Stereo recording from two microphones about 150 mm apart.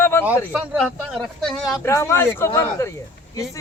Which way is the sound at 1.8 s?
20° left (ahead or behind).